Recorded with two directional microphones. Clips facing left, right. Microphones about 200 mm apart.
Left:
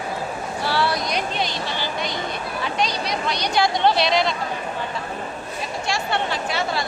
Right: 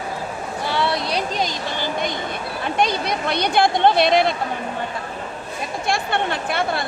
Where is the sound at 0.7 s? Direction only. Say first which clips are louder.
Even; 20° right (ahead or behind).